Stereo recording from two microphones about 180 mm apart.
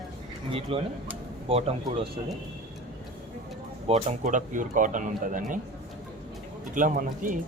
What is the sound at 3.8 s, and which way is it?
Speech, 40° right (ahead or behind).